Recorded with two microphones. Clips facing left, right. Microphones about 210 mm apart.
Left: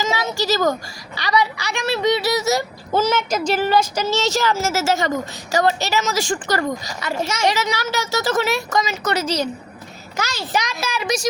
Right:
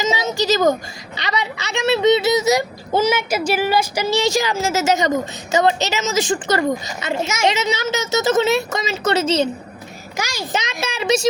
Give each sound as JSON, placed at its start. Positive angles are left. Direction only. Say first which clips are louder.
{"t": 0.0, "sound": "a woman's voice", "louder": "right 2 dB", "side_deg": -20}
{"t": 10.2, "sound": "a child's voice", "louder": "even", "side_deg": -10}
{"t": 10.5, "sound": "a woman's voice", "louder": "left 2 dB", "side_deg": -25}